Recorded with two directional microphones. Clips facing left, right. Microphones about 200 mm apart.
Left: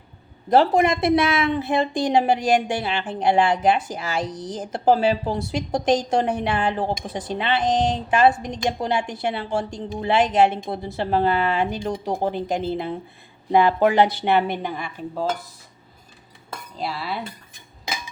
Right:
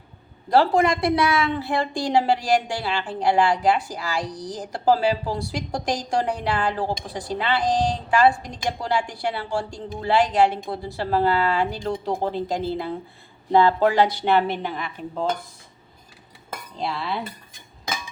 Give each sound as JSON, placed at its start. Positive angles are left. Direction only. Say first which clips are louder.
{"t": 0.5, "sound": "a woman's voice", "louder": "left 1 dB", "side_deg": 20}
{"t": 16.7, "sound": "cutlery", "louder": "right 1 dB", "side_deg": 5}